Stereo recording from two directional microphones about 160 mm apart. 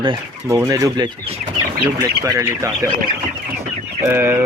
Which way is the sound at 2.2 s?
20° right (ahead or behind).